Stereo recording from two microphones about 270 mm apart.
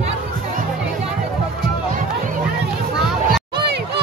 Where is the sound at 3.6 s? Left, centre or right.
Right.